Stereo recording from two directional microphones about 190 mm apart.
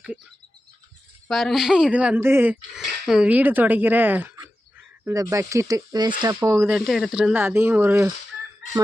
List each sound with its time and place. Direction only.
1.3 s speech: centre (ahead or behind); by 6.7 s 15° right (ahead or behind)
6.7 s speech: centre (ahead or behind)